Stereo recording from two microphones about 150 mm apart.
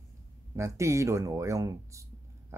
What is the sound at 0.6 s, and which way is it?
Speech, 20° right (ahead or behind).